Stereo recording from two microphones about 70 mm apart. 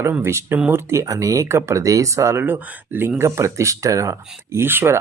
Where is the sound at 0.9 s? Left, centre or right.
Right.